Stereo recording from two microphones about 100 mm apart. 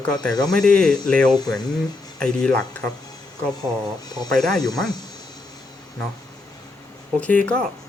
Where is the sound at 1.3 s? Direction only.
40° left (ahead or behind).